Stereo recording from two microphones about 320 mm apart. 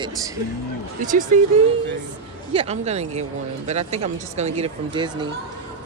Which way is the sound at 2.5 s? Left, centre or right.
Centre.